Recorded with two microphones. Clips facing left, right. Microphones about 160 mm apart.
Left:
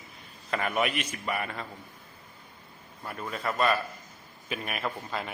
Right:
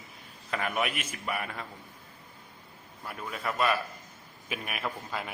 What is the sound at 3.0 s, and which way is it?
A man's voice, 5° right (ahead or behind).